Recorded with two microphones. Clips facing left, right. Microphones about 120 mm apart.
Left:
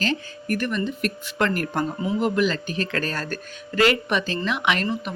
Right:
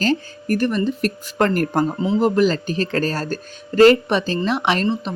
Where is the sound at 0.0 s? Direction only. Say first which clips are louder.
Right 6 dB; 35° right (ahead or behind).